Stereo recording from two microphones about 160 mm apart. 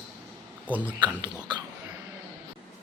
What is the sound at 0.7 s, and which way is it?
Speech, 10° right (ahead or behind).